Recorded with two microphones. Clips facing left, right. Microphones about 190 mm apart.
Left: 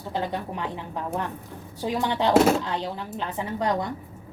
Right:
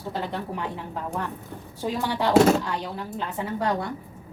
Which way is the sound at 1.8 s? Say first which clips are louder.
Left 1 dB; 20° left (ahead or behind).